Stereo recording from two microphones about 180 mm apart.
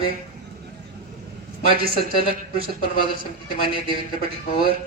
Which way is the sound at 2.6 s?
30° right (ahead or behind).